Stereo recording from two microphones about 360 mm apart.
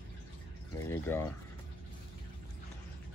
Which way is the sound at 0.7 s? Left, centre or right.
Centre.